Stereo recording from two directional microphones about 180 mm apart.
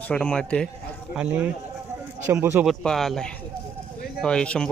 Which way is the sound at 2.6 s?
Centre (ahead or behind).